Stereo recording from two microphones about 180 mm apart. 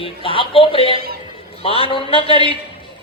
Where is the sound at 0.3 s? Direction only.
30° left (ahead or behind).